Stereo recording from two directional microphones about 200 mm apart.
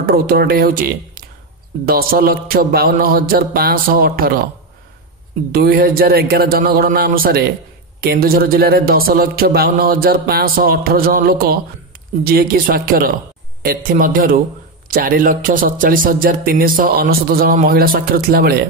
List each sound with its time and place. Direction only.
0.0 s speech: 50° right (ahead or behind)
5.5 s speech: 50° right (ahead or behind)